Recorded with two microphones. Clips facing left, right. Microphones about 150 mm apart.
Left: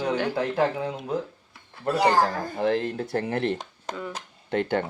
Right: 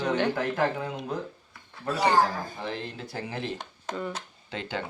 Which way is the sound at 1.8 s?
60° left (ahead or behind).